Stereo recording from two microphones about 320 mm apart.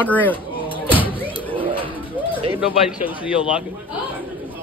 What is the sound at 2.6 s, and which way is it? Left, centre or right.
A man's voice, centre.